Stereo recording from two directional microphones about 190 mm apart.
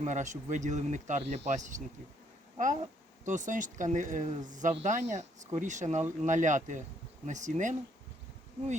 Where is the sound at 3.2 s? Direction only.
40° right (ahead or behind).